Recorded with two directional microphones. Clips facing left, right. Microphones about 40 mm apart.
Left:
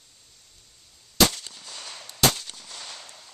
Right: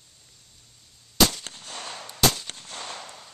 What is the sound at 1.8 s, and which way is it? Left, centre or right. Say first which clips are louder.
Gunshot: right 4 dB; right.